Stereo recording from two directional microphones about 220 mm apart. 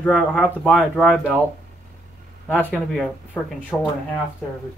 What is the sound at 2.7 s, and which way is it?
Speech, 5° left (ahead or behind).